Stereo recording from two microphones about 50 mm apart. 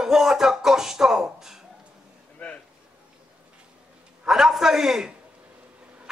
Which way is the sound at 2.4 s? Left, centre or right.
Left.